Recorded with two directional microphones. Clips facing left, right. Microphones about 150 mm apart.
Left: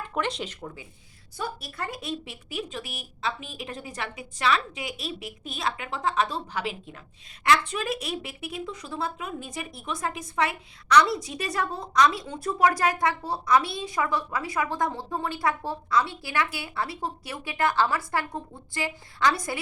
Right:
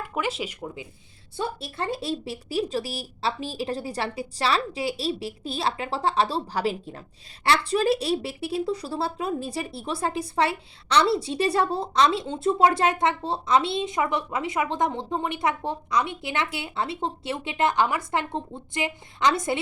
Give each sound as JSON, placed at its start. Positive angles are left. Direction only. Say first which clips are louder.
{"t": 0.1, "sound": "speech", "louder": "right 1 dB", "side_deg": -5}
{"t": 1.4, "sound": "a woman's voice", "louder": "right 4 dB", "side_deg": -25}